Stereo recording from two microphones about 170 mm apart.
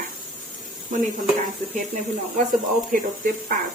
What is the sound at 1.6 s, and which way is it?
Speech, 45° right (ahead or behind).